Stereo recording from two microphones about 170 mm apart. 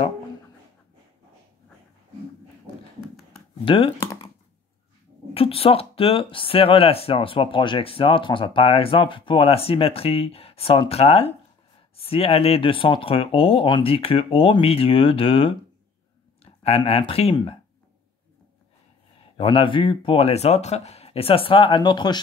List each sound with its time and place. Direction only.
3.6 s speech: 30° left (ahead or behind)
5.3 s speech: 35° left (ahead or behind)
16.6 s speech: 35° left (ahead or behind)
19.3 s speech: 30° left (ahead or behind)